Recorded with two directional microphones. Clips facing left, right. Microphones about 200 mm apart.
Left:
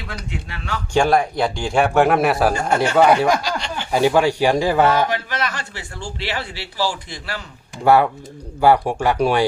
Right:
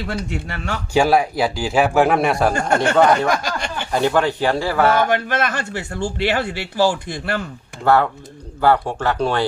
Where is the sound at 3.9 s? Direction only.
10° left (ahead or behind).